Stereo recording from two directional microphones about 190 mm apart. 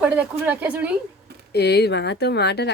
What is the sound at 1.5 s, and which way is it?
Speech, 60° left (ahead or behind).